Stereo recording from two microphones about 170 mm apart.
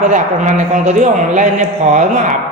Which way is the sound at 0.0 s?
45° right (ahead or behind).